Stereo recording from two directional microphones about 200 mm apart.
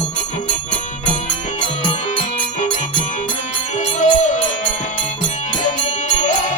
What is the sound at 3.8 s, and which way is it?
Music, 35° left (ahead or behind).